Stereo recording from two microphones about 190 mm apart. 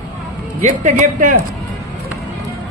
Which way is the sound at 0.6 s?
40° right (ahead or behind).